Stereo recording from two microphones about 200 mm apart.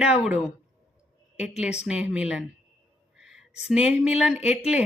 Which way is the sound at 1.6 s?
5° right (ahead or behind).